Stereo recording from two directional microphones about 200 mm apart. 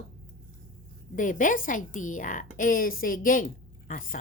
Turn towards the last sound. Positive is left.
turn(degrees=40)  # may be behind; listen again after turning